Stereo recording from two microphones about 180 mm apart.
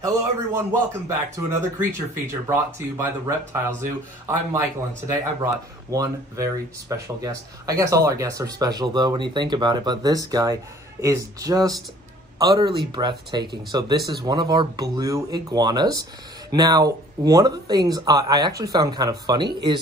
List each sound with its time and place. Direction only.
0.0 s a man's voice: 15° right (ahead or behind)